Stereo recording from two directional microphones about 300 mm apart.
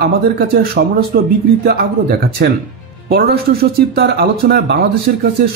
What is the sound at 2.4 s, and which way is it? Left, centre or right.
Speech, right.